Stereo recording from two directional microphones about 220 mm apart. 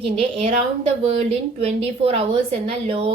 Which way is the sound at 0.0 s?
25° right (ahead or behind).